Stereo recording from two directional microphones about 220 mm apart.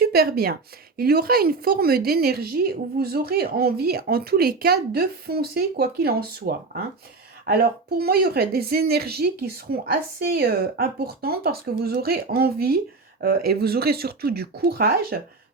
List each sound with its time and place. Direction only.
0.0 s a woman's voice: 45° right (ahead or behind)